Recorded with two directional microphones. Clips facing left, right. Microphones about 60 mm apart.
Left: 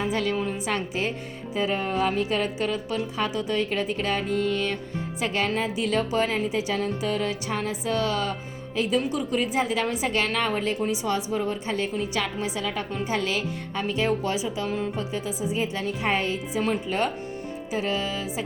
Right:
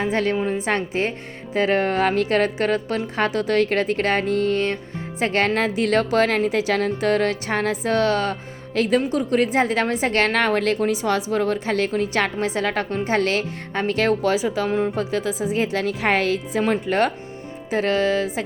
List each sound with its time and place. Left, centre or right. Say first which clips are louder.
0.1 s a woman's voice: right 5 dB; right
1.5 s a woman's voice: right 6 dB; right
9.0 s a woman's voice: right 5 dB; right
14.7 s a woman's voice: right 7 dB; right
14.9 s a woman's voice: right 6 dB; right
16.6 s a woman's voice: right 5 dB; right